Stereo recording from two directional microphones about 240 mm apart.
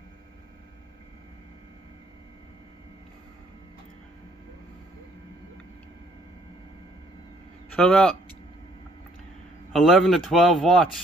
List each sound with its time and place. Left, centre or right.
7.7 s a man's voice: centre
9.7 s a man's voice: centre